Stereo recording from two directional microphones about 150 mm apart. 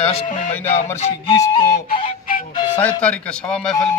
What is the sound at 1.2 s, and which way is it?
Flute, 35° left (ahead or behind).